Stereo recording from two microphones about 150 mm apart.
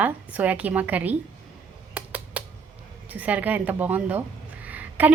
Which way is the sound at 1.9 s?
10° right (ahead or behind).